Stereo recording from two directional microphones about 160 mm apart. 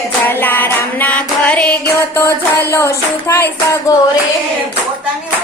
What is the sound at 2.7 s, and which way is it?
Child singing, 15° left (ahead or behind).